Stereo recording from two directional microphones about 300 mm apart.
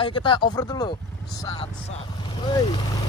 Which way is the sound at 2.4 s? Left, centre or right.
Centre.